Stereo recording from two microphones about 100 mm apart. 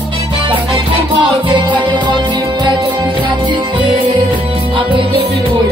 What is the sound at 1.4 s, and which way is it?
Music, 50° right (ahead or behind).